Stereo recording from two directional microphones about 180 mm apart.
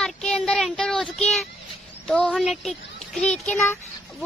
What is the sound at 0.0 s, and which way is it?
Child singing, 5° left (ahead or behind).